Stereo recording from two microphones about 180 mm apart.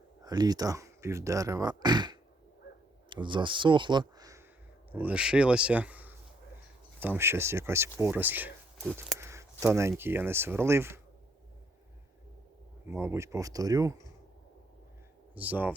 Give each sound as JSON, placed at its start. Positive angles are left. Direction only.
{"t": 0.2, "sound": "speech", "side_deg": -20}
{"t": 4.9, "sound": "speech", "side_deg": -10}
{"t": 9.1, "sound": "a sound", "side_deg": -15}
{"t": 10.0, "sound": "speech", "side_deg": -10}
{"t": 12.9, "sound": "speech", "side_deg": -15}
{"t": 15.4, "sound": "speech", "side_deg": -10}